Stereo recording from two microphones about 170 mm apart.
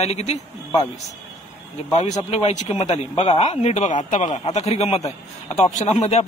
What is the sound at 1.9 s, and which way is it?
A man's voice, 40° left (ahead or behind).